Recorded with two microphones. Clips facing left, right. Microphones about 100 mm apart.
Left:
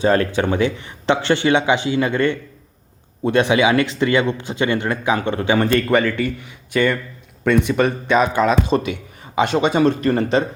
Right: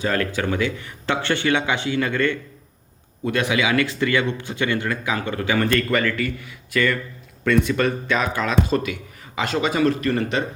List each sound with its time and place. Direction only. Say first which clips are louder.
0.0 s speech: left 6 dB; 30° left (ahead or behind)